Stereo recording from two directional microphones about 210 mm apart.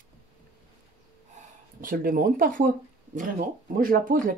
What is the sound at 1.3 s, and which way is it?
Speech, 40° right (ahead or behind).